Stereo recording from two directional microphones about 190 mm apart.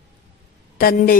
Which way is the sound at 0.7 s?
50° left (ahead or behind).